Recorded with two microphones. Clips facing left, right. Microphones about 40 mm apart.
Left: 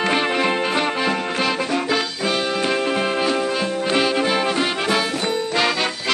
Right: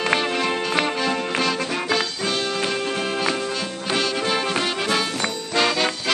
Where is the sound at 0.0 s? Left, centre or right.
Centre.